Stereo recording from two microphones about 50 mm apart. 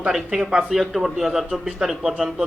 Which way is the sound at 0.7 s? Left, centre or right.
Centre.